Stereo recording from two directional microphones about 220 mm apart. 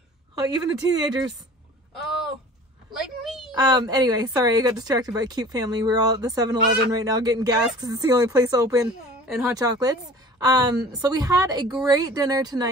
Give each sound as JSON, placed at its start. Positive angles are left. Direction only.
{"t": 0.4, "sound": "speech", "side_deg": -15}
{"t": 2.9, "sound": "a sound", "side_deg": 0}
{"t": 3.5, "sound": "speech", "side_deg": -15}